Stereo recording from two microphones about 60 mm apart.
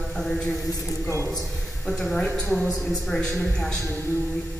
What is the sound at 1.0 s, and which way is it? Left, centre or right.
Speech, left.